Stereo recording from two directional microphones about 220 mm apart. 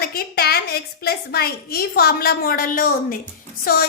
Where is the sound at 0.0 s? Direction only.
45° left (ahead or behind).